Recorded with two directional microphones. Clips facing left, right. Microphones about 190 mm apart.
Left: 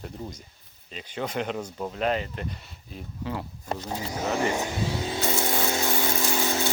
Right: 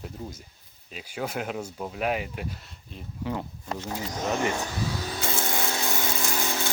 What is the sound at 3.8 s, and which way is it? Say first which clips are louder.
Speech: even; 10° left (ahead or behind).